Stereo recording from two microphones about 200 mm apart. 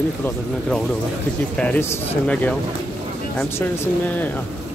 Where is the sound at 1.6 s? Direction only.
5° left (ahead or behind).